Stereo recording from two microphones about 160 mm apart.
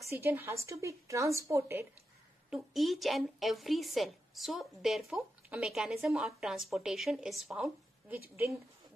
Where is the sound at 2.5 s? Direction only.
Centre (ahead or behind).